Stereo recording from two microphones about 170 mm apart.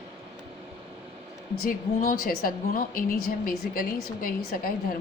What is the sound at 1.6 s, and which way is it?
A woman's voice, 55° left (ahead or behind).